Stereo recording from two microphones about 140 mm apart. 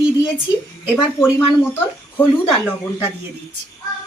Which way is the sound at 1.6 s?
15° left (ahead or behind).